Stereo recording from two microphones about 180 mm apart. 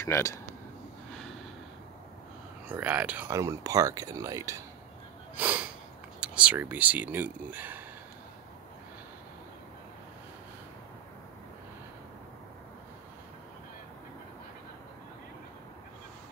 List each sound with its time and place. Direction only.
0.0 s speech: 15° left (ahead or behind)
2.7 s speech: 10° right (ahead or behind)